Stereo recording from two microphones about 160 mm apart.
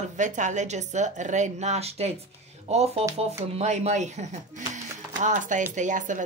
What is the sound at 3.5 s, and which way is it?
Speech, 45° right (ahead or behind).